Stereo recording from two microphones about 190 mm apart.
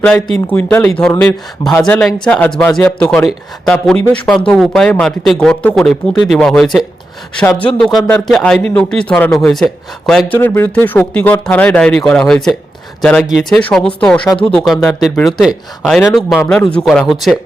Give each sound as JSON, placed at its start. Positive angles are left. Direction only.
{"t": 0.0, "sound": "speech", "side_deg": 5}
{"t": 14.3, "sound": "speech", "side_deg": 25}
{"t": 14.5, "sound": "speech", "side_deg": 0}